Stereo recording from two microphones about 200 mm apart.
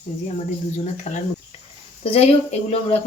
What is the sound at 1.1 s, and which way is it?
A woman's voice, 35° left (ahead or behind).